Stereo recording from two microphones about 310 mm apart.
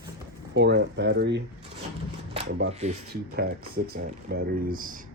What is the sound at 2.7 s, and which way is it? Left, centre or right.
Speech, right.